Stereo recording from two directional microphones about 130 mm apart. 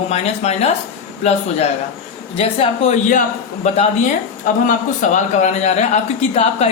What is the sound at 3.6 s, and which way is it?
Speech, 60° left (ahead or behind).